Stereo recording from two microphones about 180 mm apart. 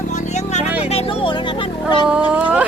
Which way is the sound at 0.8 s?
35° left (ahead or behind).